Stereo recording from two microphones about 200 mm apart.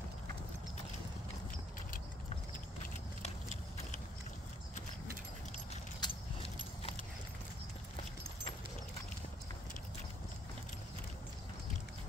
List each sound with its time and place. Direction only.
5.9 s keys jangling: 25° left (ahead or behind)